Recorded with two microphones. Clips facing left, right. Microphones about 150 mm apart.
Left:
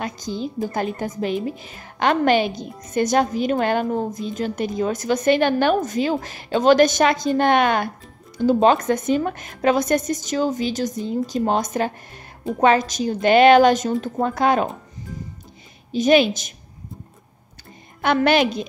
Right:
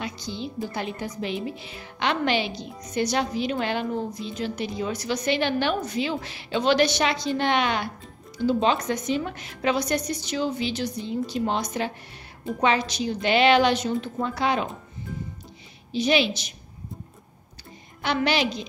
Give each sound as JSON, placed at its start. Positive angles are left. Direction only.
{"t": 0.0, "sound": "a woman's voice", "side_deg": 45}
{"t": 15.9, "sound": "a woman's voice", "side_deg": 45}
{"t": 18.0, "sound": "a woman's voice", "side_deg": 50}